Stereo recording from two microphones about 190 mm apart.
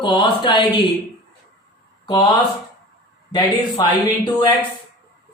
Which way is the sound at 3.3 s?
25° left (ahead or behind).